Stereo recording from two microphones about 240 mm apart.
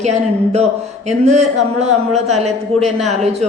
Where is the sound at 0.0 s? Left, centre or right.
Right.